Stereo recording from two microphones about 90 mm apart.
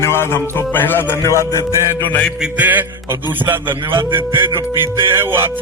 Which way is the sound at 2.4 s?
20° right (ahead or behind).